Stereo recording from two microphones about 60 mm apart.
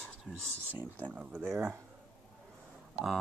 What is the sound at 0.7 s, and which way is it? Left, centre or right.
Speech, right.